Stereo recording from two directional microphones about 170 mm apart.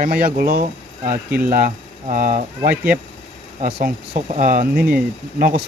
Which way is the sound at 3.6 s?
55° right (ahead or behind).